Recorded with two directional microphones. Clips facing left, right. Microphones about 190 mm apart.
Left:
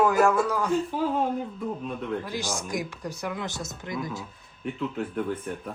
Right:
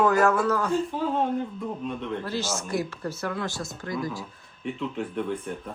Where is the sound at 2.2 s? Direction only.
15° left (ahead or behind).